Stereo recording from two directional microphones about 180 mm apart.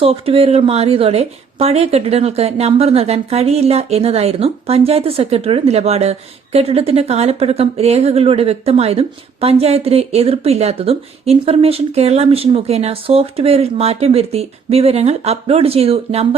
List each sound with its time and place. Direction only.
0.0 s speech: 30° right (ahead or behind)